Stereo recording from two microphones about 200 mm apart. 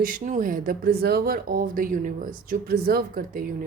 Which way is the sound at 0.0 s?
45° right (ahead or behind).